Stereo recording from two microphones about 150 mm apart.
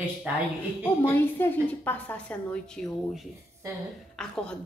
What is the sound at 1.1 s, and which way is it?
A woman's voice, 15° left (ahead or behind).